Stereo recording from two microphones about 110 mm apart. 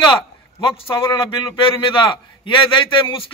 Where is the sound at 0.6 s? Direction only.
55° left (ahead or behind).